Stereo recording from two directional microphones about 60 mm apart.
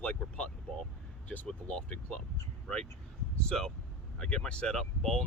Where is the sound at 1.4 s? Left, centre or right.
Centre.